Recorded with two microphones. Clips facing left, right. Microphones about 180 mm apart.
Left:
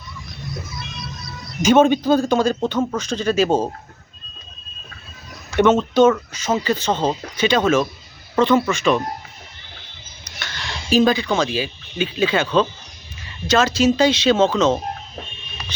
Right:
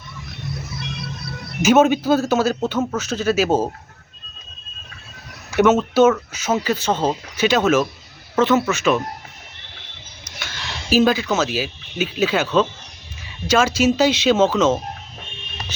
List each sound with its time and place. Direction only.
0.8 s music: 60° right (ahead or behind)
1.6 s a man's voice: 5° right (ahead or behind)
5.5 s a man's voice: 5° right (ahead or behind)
10.2 s a man's voice: 5° right (ahead or behind)